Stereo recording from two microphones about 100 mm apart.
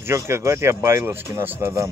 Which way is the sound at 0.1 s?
30° right (ahead or behind).